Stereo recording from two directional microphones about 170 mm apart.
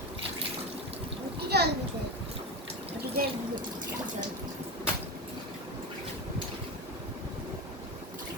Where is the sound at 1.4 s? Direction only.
70° right (ahead or behind).